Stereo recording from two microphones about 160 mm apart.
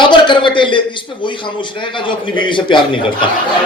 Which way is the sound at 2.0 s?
30° left (ahead or behind).